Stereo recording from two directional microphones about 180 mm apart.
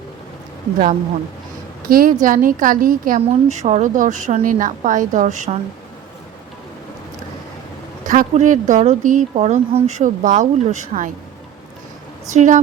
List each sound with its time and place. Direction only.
1.9 s speech: 50° right (ahead or behind)
8.0 s speech: 45° right (ahead or behind)
12.3 s speech: 40° right (ahead or behind)